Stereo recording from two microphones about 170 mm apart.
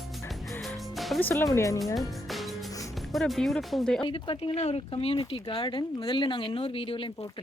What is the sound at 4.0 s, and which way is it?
Speech, 30° left (ahead or behind).